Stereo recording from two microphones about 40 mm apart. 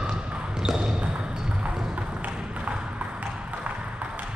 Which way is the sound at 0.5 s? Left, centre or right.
Centre.